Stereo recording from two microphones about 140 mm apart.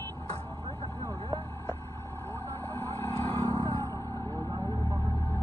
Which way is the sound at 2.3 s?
15° left (ahead or behind).